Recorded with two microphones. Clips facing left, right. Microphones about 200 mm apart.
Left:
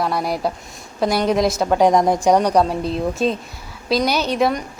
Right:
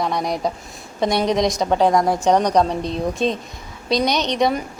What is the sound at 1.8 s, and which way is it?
A woman's voice, 20° left (ahead or behind).